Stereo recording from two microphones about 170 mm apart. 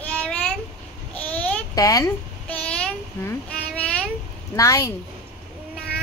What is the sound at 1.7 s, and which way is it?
Speech, 20° left (ahead or behind).